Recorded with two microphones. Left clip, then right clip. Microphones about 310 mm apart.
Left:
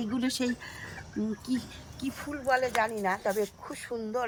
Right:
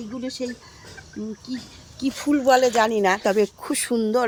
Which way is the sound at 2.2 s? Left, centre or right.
Right.